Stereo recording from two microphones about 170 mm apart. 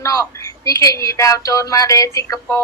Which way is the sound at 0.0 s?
20° left (ahead or behind).